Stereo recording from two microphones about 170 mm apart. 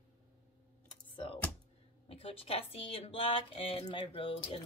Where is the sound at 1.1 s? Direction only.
30° left (ahead or behind).